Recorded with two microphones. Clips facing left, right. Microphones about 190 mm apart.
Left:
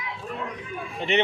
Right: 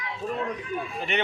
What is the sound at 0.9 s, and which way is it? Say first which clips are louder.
Speech: left 7 dB; 25° left (ahead or behind).